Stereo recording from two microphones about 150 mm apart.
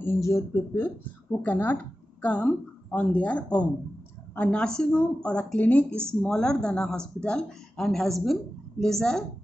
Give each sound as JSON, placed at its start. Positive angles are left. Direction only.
{"t": 0.0, "sound": "a woman's voice", "side_deg": 15}